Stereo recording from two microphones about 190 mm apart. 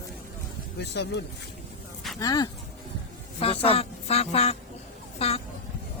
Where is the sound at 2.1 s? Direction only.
20° left (ahead or behind).